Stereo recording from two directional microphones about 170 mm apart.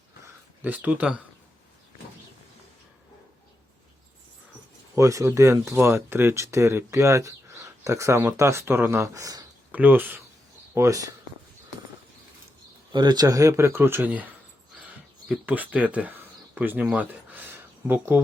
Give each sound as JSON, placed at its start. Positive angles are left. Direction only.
{"t": 0.6, "sound": "speech", "side_deg": -10}
{"t": 4.9, "sound": "speech", "side_deg": -20}
{"t": 12.9, "sound": "speech", "side_deg": -25}
{"t": 14.8, "sound": "a sound", "side_deg": -10}